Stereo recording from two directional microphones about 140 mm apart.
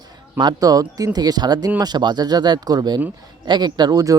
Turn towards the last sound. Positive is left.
turn(degrees=-25)  # may be behind; listen again after turning